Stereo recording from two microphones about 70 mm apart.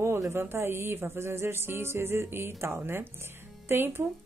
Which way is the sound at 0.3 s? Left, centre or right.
Right.